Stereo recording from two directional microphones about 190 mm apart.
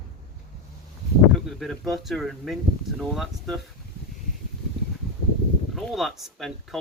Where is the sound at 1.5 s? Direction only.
Centre (ahead or behind).